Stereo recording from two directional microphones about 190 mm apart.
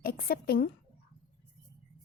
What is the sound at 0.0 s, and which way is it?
Speech, 55° left (ahead or behind).